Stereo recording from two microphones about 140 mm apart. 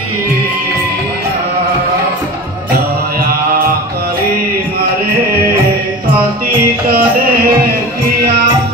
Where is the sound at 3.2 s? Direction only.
90° right.